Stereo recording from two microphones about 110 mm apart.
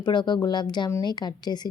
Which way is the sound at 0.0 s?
45° left (ahead or behind).